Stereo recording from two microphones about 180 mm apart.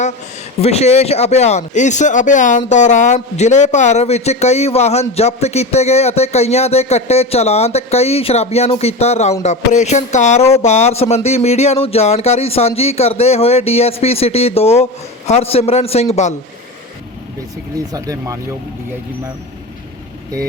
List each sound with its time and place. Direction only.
0.6 s speech: 35° left (ahead or behind)
17.9 s speech: 20° right (ahead or behind)